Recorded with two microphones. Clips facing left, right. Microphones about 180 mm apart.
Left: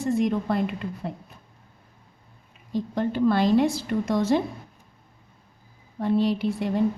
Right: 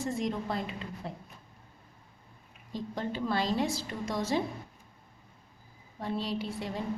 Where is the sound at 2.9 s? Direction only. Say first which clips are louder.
Left 10 dB; 60° left (ahead or behind).